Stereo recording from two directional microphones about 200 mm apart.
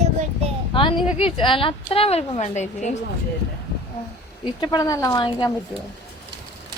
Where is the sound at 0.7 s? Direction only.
25° left (ahead or behind).